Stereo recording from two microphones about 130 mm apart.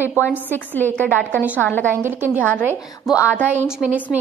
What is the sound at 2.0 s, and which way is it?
A woman's voice, 15° right (ahead or behind).